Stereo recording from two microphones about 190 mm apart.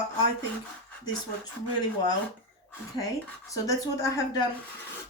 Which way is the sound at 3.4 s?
15° left (ahead or behind).